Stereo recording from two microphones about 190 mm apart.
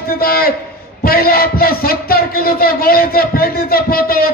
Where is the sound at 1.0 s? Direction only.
50° left (ahead or behind).